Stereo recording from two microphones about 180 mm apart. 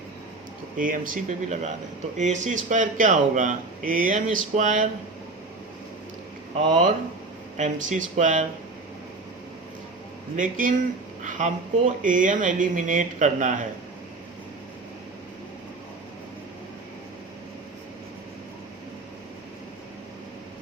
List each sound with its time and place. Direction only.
0.8 s speech: 50° right (ahead or behind)
6.7 s speech: 40° right (ahead or behind)
10.3 s speech: 45° right (ahead or behind)